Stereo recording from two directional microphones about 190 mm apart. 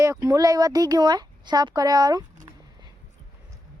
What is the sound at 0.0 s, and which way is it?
Speech, 15° right (ahead or behind).